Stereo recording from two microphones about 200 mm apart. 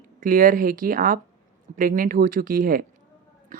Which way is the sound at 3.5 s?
40° right (ahead or behind).